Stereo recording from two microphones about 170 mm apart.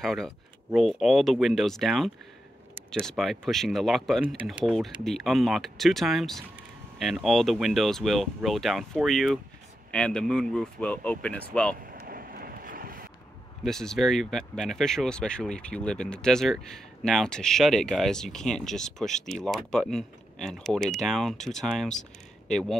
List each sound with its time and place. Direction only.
0.0 s speech: centre (ahead or behind)
11.8 s a sound: 60° right (ahead or behind)
13.7 s speech: 5° left (ahead or behind)